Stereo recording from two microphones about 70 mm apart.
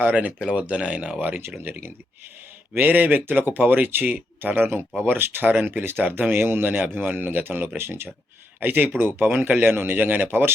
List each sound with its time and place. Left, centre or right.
0.0 s speech: right
1.4 s speech: right
2.7 s speech: right